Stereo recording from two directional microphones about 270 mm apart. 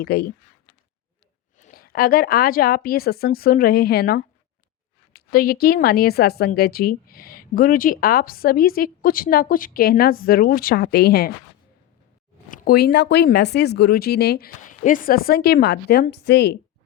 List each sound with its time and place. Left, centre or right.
0.0 s a woman's voice: left
1.5 s a woman's voice: left
12.5 s a woman's voice: left